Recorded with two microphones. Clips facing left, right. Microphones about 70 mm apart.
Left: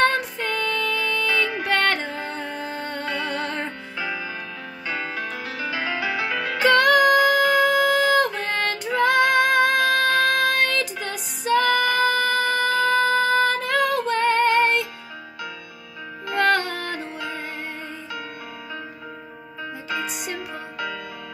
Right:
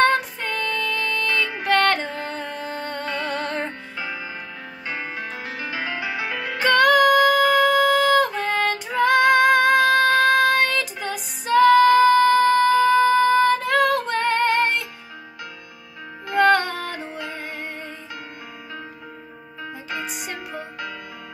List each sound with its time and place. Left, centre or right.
0.0 s music: centre
4.0 s music: centre
6.6 s music: centre
16.3 s music: centre
20.1 s music: centre